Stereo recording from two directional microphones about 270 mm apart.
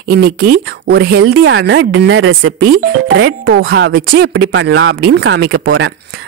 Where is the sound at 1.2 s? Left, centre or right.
Right.